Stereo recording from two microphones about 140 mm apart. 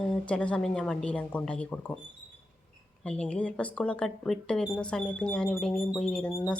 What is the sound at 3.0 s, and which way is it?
Speech, 5° left (ahead or behind).